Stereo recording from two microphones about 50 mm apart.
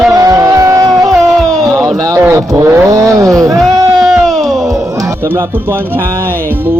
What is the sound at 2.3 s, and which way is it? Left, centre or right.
Speech, right.